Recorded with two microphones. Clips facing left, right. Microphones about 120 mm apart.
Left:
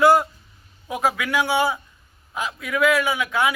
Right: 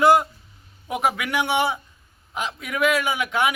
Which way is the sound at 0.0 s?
20° right (ahead or behind).